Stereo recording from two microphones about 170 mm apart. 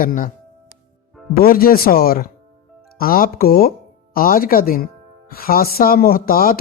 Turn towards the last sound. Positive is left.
turn(degrees=55)  # may be behind; listen again after turning